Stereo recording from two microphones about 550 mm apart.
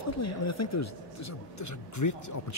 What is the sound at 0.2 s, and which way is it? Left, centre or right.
Speech, left.